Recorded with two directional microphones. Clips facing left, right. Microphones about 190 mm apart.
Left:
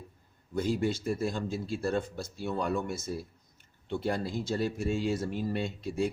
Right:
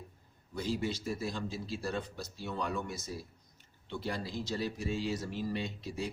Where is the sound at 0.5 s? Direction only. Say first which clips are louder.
Left 5 dB; 50° left (ahead or behind).